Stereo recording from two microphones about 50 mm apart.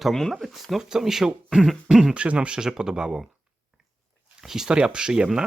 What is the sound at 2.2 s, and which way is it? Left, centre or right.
Speech, right.